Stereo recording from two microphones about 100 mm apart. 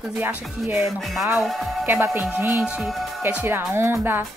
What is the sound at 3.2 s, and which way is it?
Speech, 20° right (ahead or behind).